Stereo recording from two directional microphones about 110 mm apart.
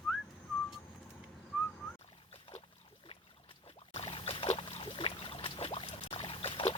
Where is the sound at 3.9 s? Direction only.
65° left (ahead or behind).